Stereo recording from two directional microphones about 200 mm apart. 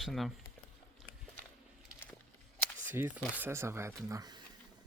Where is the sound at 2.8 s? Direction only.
10° right (ahead or behind).